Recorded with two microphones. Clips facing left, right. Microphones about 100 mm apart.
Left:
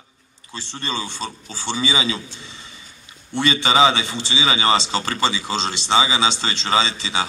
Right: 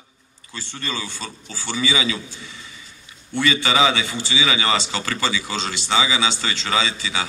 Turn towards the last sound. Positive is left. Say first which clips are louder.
# left 2 dB
turn(degrees=25)  # may be behind; listen again after turning